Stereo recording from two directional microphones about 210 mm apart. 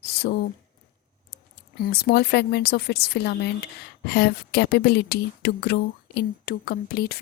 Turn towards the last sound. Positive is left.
turn(degrees=45)  # may be behind; listen again after turning